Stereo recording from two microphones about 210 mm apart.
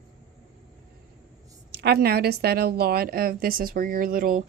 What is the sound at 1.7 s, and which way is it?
Speech, 50° right (ahead or behind).